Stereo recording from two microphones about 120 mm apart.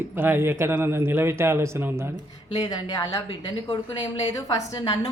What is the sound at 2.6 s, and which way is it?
A woman's voice, 40° left (ahead or behind).